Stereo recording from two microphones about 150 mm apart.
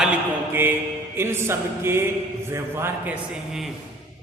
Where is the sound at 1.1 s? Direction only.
15° right (ahead or behind).